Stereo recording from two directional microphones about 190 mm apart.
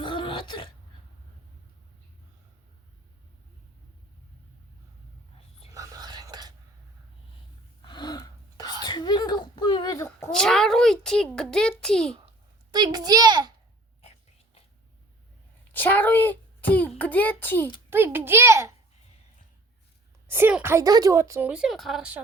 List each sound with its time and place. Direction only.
0.0 s throat clearing: 25° left (ahead or behind)
5.7 s whispering: 15° right (ahead or behind)
7.9 s gasp: 20° left (ahead or behind)
8.8 s a sound: 20° left (ahead or behind)
10.3 s a sound: centre (ahead or behind)
11.8 s a child's voice: 5° left (ahead or behind)
12.7 s a child's voice: 20° right (ahead or behind)
15.7 s a sound: 10° left (ahead or behind)
17.0 s a child's voice: 10° left (ahead or behind)
17.9 s speech: 10° right (ahead or behind)
20.2 s speech: 10° right (ahead or behind)